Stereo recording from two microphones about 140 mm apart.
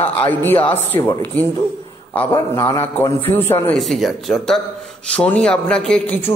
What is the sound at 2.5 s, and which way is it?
A man's voice, 25° left (ahead or behind).